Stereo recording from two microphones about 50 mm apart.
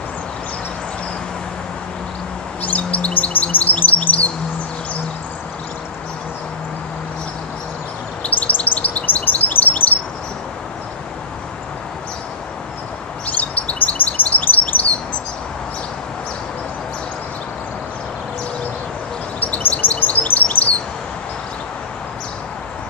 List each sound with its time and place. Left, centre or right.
2.6 s chirp: left
8.2 s chirp: left
13.4 s chirp: left
14.4 s chirp: left
19.4 s bird: left
20.0 s chirp: left